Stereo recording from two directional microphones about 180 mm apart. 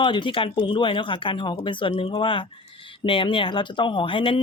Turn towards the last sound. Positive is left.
turn(degrees=30)  # may be behind; listen again after turning